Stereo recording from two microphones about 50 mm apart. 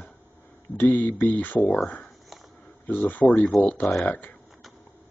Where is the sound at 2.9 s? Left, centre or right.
Left.